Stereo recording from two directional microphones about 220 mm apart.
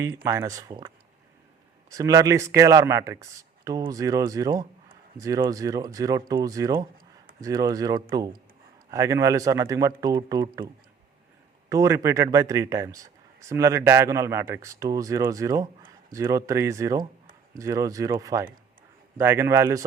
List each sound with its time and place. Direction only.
0.2 s speech: 10° right (ahead or behind)
11.7 s speech: 15° right (ahead or behind)